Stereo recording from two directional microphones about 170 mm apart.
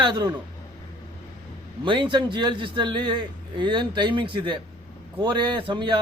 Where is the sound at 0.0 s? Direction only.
25° right (ahead or behind).